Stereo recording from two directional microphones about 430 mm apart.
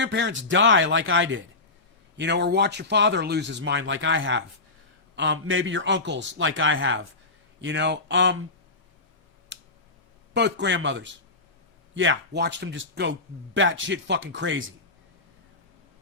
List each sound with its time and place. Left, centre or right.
0.0 s speech: right
9.5 s a sound: right
10.3 s speech: right